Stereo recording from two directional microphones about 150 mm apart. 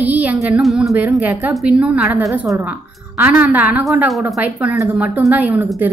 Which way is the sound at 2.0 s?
20° right (ahead or behind).